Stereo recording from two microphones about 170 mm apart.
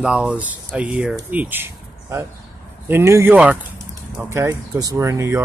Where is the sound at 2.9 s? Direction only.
15° right (ahead or behind).